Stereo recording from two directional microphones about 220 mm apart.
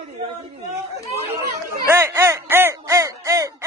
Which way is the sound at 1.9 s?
10° right (ahead or behind).